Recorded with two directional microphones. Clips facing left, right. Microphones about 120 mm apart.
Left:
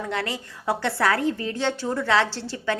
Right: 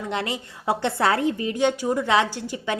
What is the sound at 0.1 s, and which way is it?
A woman's voice, 20° right (ahead or behind).